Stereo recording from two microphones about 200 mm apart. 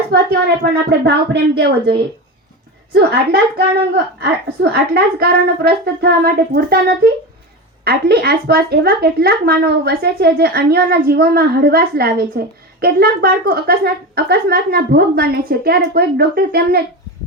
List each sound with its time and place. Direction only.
0.1 s a woman's voice: 55° right (ahead or behind)
2.9 s a woman's voice: 55° right (ahead or behind)